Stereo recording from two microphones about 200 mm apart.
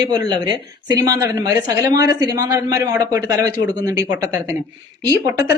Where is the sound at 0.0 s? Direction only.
20° right (ahead or behind).